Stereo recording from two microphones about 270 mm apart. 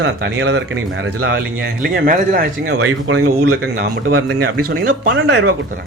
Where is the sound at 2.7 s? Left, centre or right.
Right.